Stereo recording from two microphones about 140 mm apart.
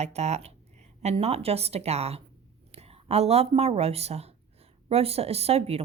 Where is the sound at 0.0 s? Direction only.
50° right (ahead or behind).